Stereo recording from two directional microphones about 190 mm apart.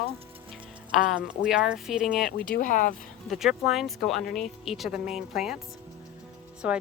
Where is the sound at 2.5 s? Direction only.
45° left (ahead or behind).